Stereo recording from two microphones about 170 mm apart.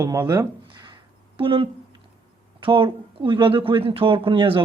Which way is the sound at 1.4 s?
30° right (ahead or behind).